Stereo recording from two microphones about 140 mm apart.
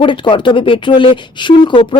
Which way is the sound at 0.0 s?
35° left (ahead or behind).